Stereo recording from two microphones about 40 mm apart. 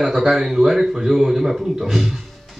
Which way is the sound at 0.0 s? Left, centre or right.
Centre.